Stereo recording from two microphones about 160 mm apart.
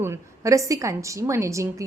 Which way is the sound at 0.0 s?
15° right (ahead or behind).